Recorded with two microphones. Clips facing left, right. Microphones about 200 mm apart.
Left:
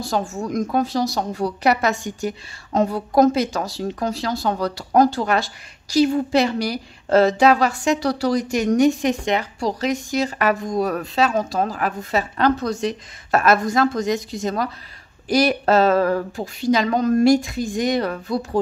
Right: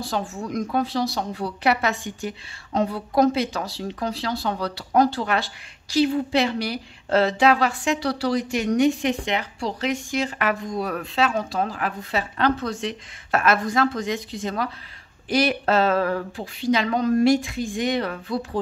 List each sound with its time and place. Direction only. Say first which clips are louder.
0.0 s a woman's voice: left 4 dB; 45° left (ahead or behind)